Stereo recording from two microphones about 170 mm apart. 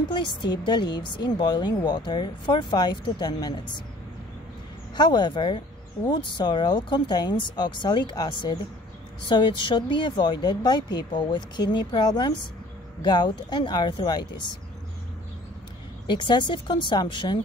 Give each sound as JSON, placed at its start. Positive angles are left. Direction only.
{"t": 0.4, "sound": "speech", "side_deg": 25}
{"t": 4.9, "sound": "speech", "side_deg": 25}
{"t": 16.1, "sound": "speech", "side_deg": 25}